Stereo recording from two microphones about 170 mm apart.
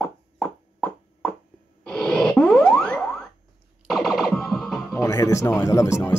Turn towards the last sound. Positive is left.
turn(degrees=15)  # may be behind; listen again after turning